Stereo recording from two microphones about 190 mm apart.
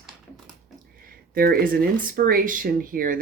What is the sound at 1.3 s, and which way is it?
A woman's voice, 50° right (ahead or behind).